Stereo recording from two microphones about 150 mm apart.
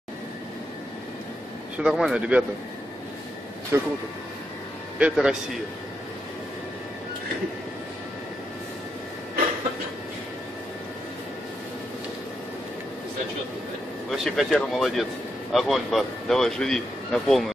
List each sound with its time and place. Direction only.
1.8 s speech: 5° right (ahead or behind)
3.7 s speech: 15° right (ahead or behind)
4.9 s speech: 5° right (ahead or behind)
14.1 s speech: centre (ahead or behind)